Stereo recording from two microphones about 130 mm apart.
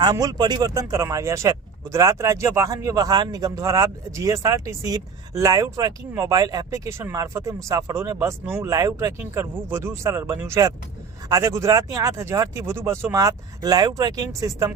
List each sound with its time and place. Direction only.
0.0 s speech: 30° right (ahead or behind)